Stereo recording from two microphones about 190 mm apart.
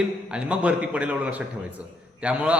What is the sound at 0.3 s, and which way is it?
A man's voice, 5° right (ahead or behind).